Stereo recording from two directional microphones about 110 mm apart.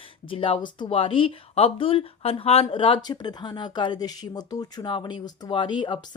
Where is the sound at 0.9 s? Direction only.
55° left (ahead or behind).